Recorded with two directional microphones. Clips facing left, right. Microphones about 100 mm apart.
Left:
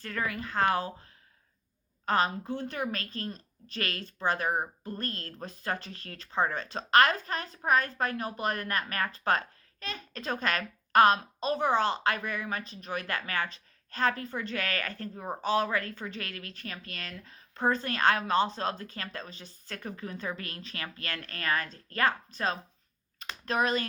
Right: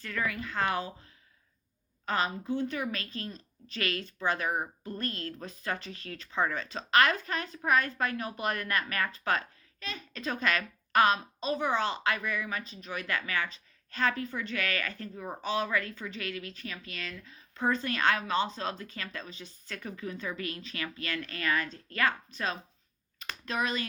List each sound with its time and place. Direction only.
0.0 s a woman's voice: 40° left (ahead or behind)
2.0 s a child's voice: 40° left (ahead or behind)
15.1 s speech: 25° left (ahead or behind)
15.4 s a child's voice: 40° left (ahead or behind)